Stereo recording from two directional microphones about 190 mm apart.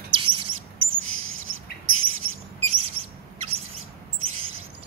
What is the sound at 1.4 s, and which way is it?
Bird, 90° right.